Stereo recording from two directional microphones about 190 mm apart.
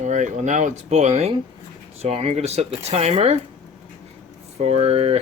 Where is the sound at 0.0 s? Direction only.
40° right (ahead or behind).